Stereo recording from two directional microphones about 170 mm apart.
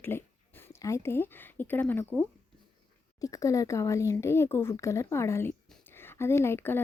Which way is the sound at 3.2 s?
20° left (ahead or behind).